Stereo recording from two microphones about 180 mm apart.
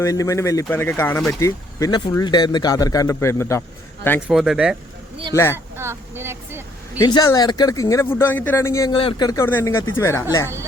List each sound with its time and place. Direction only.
0.0 s speech: 20° left (ahead or behind)
4.3 s speech: 5° right (ahead or behind)
5.3 s speech: 15° left (ahead or behind)
5.7 s speech: 15° right (ahead or behind)
7.0 s speech: 20° left (ahead or behind)
8.9 s speech: 30° left (ahead or behind)